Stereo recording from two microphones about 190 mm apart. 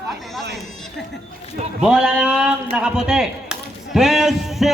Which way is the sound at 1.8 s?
5° right (ahead or behind).